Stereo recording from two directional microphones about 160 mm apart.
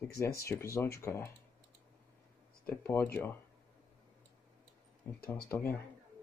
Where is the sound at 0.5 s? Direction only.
15° left (ahead or behind).